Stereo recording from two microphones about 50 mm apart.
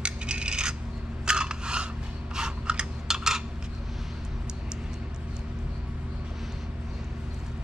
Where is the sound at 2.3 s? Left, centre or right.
Centre.